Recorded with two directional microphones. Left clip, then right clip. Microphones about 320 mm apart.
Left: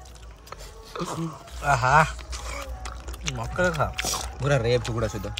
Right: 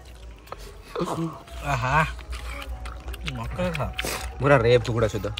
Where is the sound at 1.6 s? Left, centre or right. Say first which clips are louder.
Left 4 dB; left.